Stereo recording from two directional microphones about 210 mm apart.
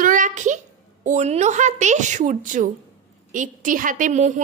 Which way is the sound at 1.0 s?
35° right (ahead or behind).